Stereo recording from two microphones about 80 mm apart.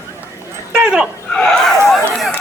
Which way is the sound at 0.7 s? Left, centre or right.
Centre.